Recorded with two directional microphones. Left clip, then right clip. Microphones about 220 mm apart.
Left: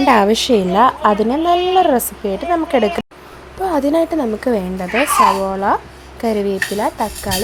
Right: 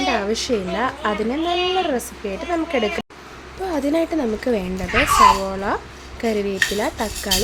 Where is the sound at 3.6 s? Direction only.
15° left (ahead or behind).